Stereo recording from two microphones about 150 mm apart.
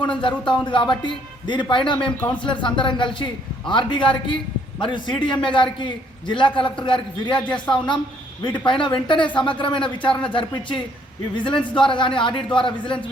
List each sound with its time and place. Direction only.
0.2 s a man's voice: 30° left (ahead or behind)